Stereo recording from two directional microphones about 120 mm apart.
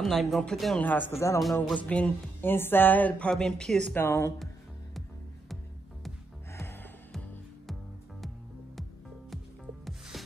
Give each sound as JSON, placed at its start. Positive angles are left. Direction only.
{"t": 0.0, "sound": "speech", "side_deg": 0}
{"t": 0.8, "sound": "speech", "side_deg": 15}
{"t": 1.4, "sound": "speech", "side_deg": 0}
{"t": 1.8, "sound": "speech", "side_deg": 10}
{"t": 3.9, "sound": "speech", "side_deg": 20}
{"t": 6.5, "sound": "music", "side_deg": 20}
{"t": 7.1, "sound": "music", "side_deg": 0}
{"t": 9.8, "sound": "rub", "side_deg": 0}